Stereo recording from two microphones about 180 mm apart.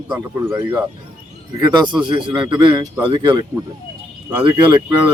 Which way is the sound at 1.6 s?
25° right (ahead or behind).